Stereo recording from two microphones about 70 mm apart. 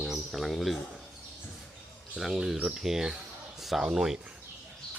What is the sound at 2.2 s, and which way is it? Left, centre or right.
Speech, centre.